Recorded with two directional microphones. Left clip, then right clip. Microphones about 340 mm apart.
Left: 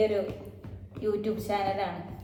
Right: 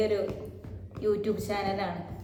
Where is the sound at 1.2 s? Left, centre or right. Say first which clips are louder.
Left 1 dB; centre.